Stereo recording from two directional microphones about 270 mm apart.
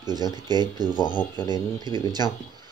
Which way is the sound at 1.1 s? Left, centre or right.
Centre.